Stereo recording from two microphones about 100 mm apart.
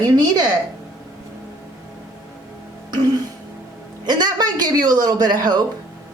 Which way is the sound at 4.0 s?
45° right (ahead or behind).